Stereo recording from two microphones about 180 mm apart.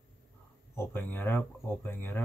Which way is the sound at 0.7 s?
10° left (ahead or behind).